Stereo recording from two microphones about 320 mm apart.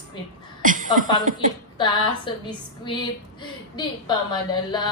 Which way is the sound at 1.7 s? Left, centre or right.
Centre.